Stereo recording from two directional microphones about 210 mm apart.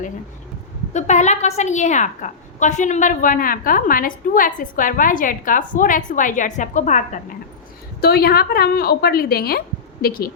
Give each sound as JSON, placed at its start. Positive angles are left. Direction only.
{"t": 0.9, "sound": "a woman's voice", "side_deg": 35}
{"t": 8.0, "sound": "a woman's voice", "side_deg": 45}